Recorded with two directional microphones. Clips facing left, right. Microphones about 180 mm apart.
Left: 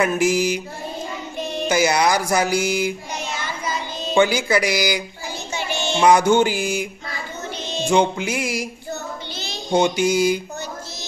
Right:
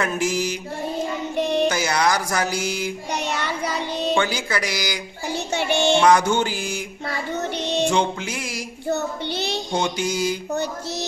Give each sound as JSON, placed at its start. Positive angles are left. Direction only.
{"t": 0.0, "sound": "speech", "side_deg": 10}
{"t": 1.3, "sound": "music", "side_deg": -70}
{"t": 1.7, "sound": "speech", "side_deg": 10}
{"t": 3.1, "sound": "music", "side_deg": -65}
{"t": 4.1, "sound": "speech", "side_deg": 10}
{"t": 5.3, "sound": "music", "side_deg": -65}
{"t": 5.9, "sound": "speech", "side_deg": 10}
{"t": 7.6, "sound": "music", "side_deg": -70}
{"t": 7.9, "sound": "speech", "side_deg": 10}
{"t": 8.9, "sound": "child singing", "side_deg": -70}
{"t": 9.7, "sound": "speech", "side_deg": 10}
{"t": 10.5, "sound": "music", "side_deg": -70}